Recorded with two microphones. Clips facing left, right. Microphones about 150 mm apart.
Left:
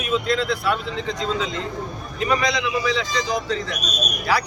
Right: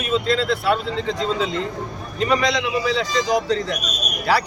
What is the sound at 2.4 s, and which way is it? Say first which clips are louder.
Speech: right 2 dB; 30° right (ahead or behind).